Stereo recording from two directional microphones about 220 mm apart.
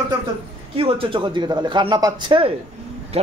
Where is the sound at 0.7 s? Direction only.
25° right (ahead or behind).